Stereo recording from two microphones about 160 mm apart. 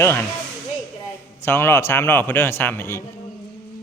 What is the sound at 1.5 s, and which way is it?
Speech, 15° left (ahead or behind).